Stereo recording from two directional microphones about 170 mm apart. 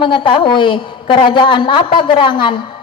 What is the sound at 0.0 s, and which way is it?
A woman's voice, 30° left (ahead or behind).